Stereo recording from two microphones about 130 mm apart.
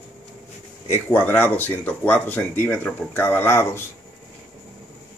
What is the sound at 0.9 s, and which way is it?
Speech, 15° left (ahead or behind).